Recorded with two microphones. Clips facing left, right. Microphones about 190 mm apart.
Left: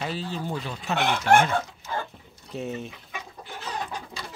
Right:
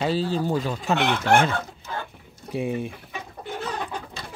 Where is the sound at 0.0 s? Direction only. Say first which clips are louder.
Right 7 dB; 30° right (ahead or behind).